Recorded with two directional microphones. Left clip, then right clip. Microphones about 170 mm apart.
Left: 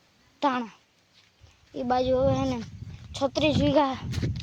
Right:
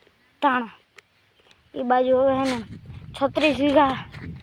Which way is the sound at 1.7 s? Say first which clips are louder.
Right 5 dB; 15° right (ahead or behind).